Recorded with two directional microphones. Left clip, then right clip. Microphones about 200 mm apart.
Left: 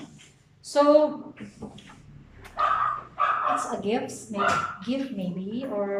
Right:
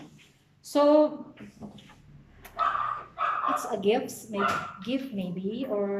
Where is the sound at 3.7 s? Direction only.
15° right (ahead or behind).